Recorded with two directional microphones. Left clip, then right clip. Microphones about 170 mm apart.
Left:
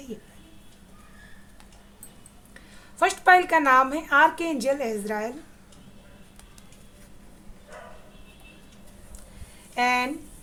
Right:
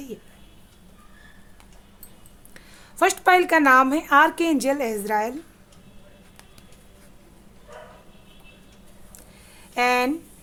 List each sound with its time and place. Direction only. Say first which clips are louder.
3.0 s a woman's voice: right 1 dB; 45° right (ahead or behind)
9.7 s a woman's voice: right 3 dB; 45° right (ahead or behind)